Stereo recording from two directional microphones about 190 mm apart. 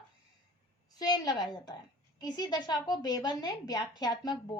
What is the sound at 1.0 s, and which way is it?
A woman's voice, 20° left (ahead or behind).